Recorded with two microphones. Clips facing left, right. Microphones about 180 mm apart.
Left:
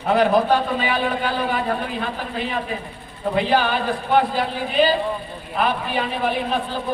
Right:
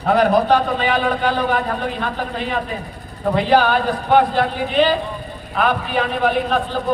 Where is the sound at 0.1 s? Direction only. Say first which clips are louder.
Right 2 dB; 40° right (ahead or behind).